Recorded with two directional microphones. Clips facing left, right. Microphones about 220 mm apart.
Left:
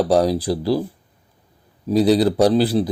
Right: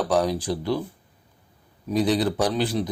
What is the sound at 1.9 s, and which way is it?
Speech, 35° left (ahead or behind).